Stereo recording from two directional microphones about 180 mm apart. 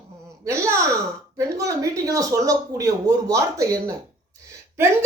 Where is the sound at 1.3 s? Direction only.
15° right (ahead or behind).